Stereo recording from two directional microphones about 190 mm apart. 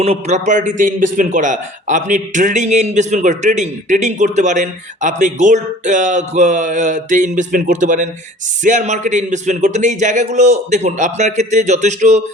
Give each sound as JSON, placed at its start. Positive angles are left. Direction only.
{"t": 0.0, "sound": "a man's voice", "side_deg": -35}